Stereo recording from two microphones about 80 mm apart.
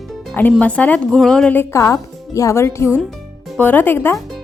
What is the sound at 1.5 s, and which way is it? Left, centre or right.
Speech, left.